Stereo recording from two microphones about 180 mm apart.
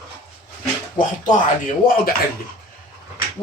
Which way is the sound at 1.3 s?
45° left (ahead or behind).